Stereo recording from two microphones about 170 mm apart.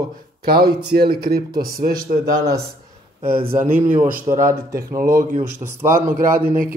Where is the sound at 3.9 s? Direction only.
15° right (ahead or behind).